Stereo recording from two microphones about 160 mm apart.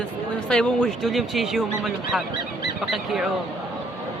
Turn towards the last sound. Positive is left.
turn(degrees=0)  # may be behind; listen again after turning